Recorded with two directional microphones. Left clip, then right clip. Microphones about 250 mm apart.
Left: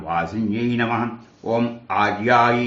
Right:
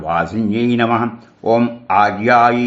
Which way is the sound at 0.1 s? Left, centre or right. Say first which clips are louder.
Right 5 dB; right.